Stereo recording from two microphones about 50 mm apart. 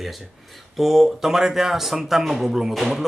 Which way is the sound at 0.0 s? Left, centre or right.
Centre.